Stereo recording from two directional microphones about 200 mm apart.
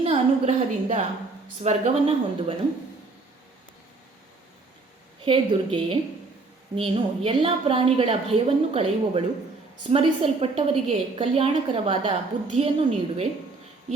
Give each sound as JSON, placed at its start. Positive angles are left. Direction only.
{"t": 0.0, "sound": "a woman's voice", "side_deg": -30}
{"t": 5.2, "sound": "a woman's voice", "side_deg": -25}